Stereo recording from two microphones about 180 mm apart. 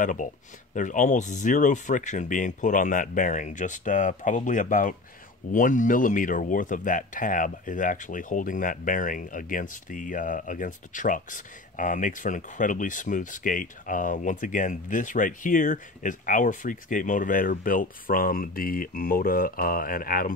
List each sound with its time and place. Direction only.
0.0 s speech: 45° left (ahead or behind)